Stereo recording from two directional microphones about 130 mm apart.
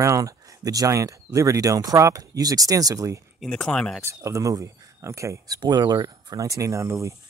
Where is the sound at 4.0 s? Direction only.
25° right (ahead or behind).